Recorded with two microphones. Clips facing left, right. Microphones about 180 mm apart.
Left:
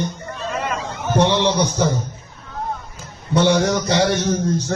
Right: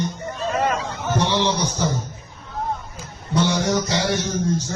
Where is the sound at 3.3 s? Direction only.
60° left (ahead or behind).